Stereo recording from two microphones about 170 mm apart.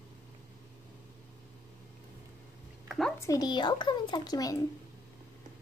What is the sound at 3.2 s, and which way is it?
Speech, 20° left (ahead or behind).